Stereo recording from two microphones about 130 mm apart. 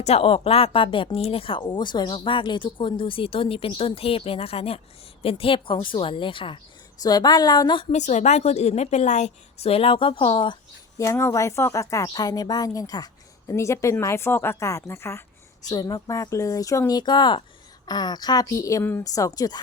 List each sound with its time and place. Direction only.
0.0 s speech: 50° left (ahead or behind)
7.0 s speech: 30° left (ahead or behind)
7.9 s a woman's voice: 65° left (ahead or behind); by 10.6 s 40° left (ahead or behind)
10.9 s a woman's voice: 25° left (ahead or behind)
19.1 s a woman's voice: 30° left (ahead or behind)